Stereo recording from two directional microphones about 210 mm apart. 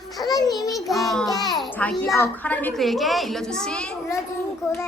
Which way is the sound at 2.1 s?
10° left (ahead or behind).